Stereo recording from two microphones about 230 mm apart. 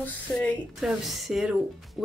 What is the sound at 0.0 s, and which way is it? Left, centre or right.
Speech, centre.